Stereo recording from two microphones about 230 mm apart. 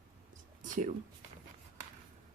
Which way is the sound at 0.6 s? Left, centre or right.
Right.